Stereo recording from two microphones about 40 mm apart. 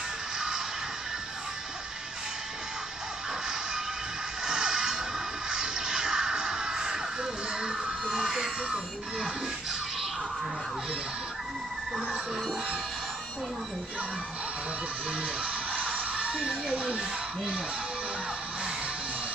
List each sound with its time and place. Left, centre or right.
4.5 s music: centre
7.8 s baby cry: right
8.6 s speech: centre
15.2 s music: right